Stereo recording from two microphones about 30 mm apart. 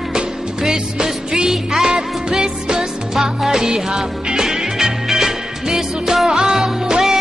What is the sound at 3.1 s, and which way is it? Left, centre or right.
Music, centre.